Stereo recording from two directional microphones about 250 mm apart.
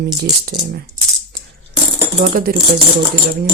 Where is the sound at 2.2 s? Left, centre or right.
Right.